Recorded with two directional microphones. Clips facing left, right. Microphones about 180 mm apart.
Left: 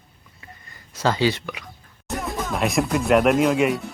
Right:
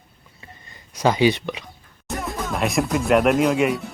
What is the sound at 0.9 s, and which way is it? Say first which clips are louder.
Speech: right 3 dB; 15° right (ahead or behind).